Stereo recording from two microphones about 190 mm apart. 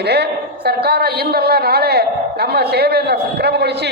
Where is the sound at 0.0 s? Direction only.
60° right (ahead or behind).